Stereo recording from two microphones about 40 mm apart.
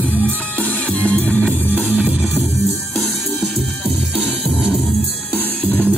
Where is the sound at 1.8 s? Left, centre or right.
Right.